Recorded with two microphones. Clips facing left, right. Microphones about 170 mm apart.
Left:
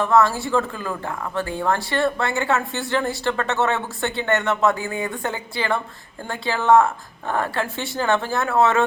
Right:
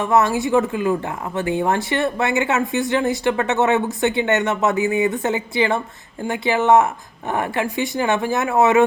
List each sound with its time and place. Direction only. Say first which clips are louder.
0.0 s speech: right 1 dB; 20° right (ahead or behind)